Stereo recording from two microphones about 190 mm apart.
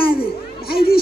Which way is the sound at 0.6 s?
55° left (ahead or behind).